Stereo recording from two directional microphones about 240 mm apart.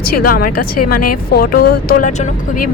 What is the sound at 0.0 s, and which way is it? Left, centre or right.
Speech, left.